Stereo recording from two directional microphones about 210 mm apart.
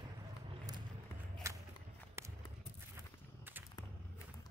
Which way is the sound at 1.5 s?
15° right (ahead or behind).